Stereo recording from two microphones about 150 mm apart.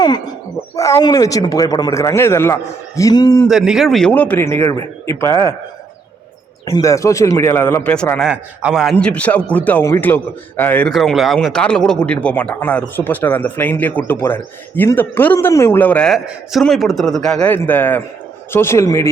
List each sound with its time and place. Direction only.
0.8 s speech: 20° left (ahead or behind)
3.5 s speech: 5° right (ahead or behind); by 5.5 s 20° left (ahead or behind)
6.7 s speech: 20° left (ahead or behind)
8.2 s speech: 5° right (ahead or behind); by 19.0 s 15° left (ahead or behind)